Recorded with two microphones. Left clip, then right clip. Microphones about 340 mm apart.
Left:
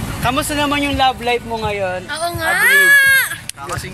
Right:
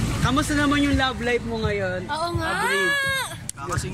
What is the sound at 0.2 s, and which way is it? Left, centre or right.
A man's voice, centre.